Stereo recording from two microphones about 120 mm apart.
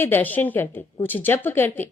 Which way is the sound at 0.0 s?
15° left (ahead or behind).